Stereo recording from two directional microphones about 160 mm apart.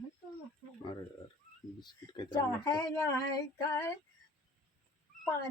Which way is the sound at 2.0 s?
25° left (ahead or behind).